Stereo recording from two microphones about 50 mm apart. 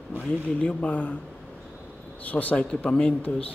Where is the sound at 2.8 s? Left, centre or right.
Centre.